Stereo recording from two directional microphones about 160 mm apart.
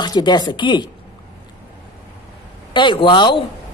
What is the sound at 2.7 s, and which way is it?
Speech, 30° left (ahead or behind).